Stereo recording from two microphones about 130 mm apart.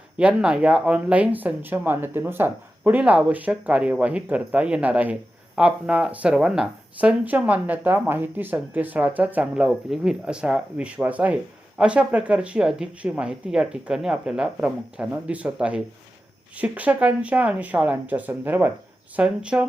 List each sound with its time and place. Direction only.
0.2 s speech: 5° right (ahead or behind)